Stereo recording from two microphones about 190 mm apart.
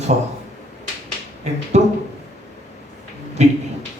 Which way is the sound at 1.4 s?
35° right (ahead or behind).